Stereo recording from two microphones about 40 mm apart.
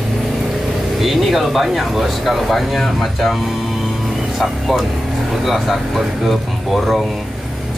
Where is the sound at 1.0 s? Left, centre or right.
Centre.